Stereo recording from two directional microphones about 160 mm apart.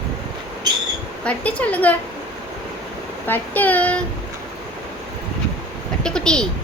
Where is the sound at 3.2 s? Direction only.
10° left (ahead or behind).